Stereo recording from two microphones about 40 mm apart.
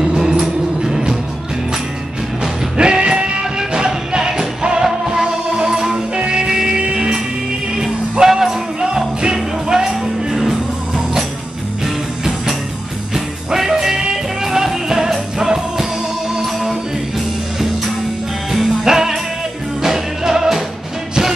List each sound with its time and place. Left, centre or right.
0.0 s music: centre
2.8 s music: right
7.8 s music: centre
13.1 s music: centre
18.5 s music: centre